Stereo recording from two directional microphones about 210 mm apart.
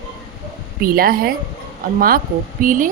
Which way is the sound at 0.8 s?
45° right (ahead or behind).